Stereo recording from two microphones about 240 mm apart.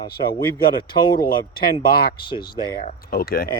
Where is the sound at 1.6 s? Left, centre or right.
Left.